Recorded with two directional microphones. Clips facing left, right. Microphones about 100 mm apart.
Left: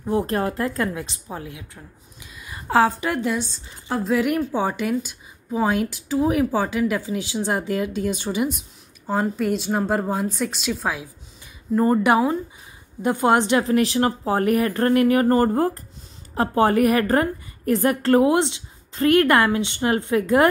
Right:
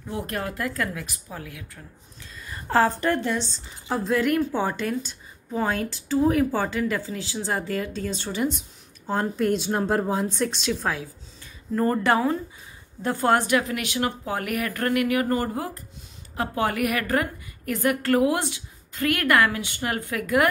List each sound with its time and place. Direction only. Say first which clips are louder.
0.3 s a woman's voice: left 6 dB; 30° left (ahead or behind)
2.3 s a woman's voice: left 3 dB; 10° left (ahead or behind); by 15.8 s 45° left (ahead or behind)
16.3 s a woman's voice: left 7 dB; 35° left (ahead or behind)